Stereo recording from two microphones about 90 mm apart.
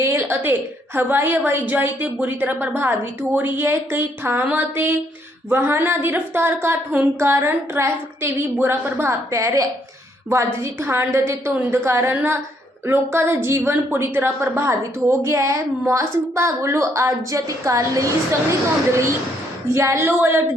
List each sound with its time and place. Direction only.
0.0 s a sound: 30° right (ahead or behind)
0.9 s a woman's voice: 25° right (ahead or behind)
19.7 s a woman's voice: 30° right (ahead or behind)